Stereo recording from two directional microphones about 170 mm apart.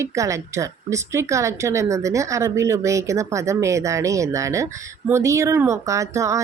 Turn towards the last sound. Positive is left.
turn(degrees=-20)  # may be behind; listen again after turning